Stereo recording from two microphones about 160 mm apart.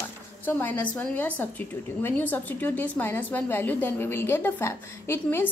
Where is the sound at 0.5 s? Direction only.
10° left (ahead or behind).